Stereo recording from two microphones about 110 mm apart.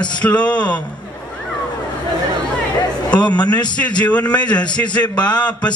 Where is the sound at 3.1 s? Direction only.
10° left (ahead or behind).